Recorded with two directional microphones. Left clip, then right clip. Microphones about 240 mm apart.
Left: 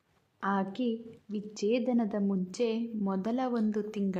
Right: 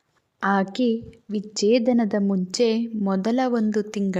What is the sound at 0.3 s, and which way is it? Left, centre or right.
A woman's voice, right.